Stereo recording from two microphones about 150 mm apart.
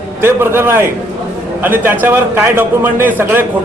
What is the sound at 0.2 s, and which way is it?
A man's voice, 15° right (ahead or behind).